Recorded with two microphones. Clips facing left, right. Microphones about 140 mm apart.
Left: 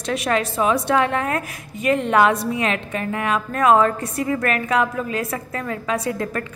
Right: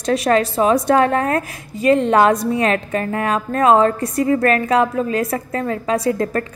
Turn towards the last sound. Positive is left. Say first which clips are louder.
# right 6 dB
turn(degrees=-35)  # may be behind; listen again after turning